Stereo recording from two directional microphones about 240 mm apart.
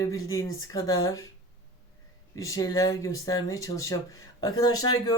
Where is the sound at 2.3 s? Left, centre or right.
Centre.